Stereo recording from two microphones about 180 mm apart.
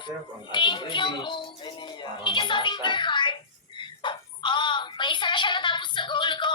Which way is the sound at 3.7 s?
25° left (ahead or behind).